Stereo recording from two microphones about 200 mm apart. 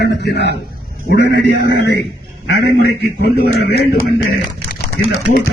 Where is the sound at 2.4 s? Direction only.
50° left (ahead or behind).